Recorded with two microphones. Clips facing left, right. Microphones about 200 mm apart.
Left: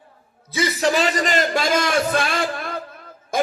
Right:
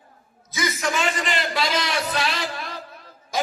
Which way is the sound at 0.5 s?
35° left (ahead or behind).